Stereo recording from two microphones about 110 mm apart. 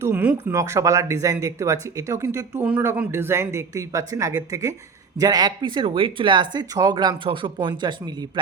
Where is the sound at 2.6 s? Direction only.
15° right (ahead or behind).